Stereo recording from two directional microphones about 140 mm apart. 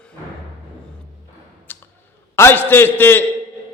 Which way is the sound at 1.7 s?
15° left (ahead or behind).